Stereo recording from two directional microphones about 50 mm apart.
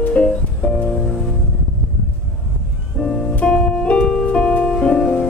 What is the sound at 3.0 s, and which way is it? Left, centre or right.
Music, centre.